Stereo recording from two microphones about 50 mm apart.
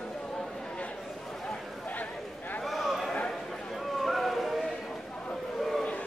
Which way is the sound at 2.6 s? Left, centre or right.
Centre.